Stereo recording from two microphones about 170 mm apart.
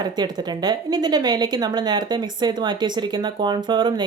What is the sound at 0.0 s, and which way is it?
Speech, 25° right (ahead or behind).